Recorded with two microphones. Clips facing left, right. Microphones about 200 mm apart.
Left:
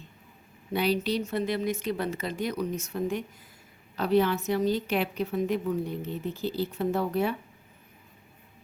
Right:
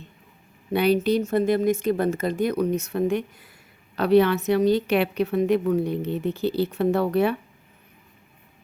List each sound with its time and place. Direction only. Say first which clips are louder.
0.7 s a woman's voice: right 7 dB; 60° right (ahead or behind)